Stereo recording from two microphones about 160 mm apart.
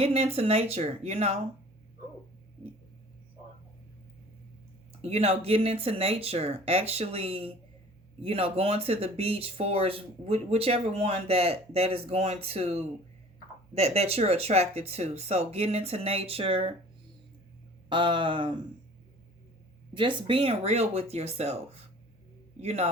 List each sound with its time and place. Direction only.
0.0 s speech: 40° right (ahead or behind)
5.0 s speech: 40° right (ahead or behind)
17.8 s speech: 30° right (ahead or behind)
19.9 s speech: 30° right (ahead or behind)